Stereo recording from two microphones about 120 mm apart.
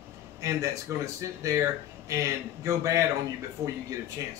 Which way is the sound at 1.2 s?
25° right (ahead or behind).